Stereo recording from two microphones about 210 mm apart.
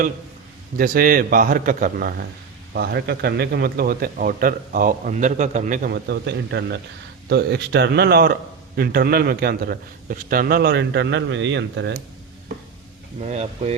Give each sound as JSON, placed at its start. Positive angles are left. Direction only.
{"t": 0.8, "sound": "a man's voice", "side_deg": -45}
{"t": 13.2, "sound": "speech", "side_deg": -30}